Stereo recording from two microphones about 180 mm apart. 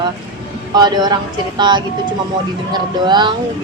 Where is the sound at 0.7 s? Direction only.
20° right (ahead or behind).